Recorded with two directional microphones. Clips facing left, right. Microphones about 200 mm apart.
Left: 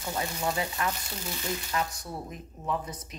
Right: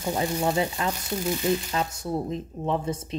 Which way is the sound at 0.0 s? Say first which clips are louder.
Right 6 dB; 25° right (ahead or behind).